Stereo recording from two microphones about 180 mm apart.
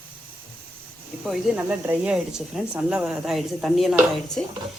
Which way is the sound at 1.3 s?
5° right (ahead or behind).